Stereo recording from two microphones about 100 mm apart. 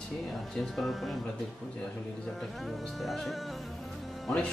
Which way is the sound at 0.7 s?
Centre (ahead or behind).